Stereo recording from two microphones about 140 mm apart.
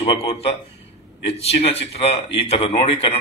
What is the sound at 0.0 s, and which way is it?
Speech, 45° left (ahead or behind).